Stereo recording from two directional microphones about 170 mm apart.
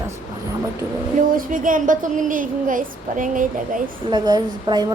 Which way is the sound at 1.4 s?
50° right (ahead or behind).